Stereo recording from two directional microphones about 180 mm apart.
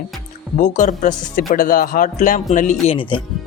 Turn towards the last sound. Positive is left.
turn(degrees=30)  # may be behind; listen again after turning